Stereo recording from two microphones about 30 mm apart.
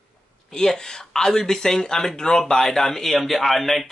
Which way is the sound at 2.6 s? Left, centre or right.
Centre.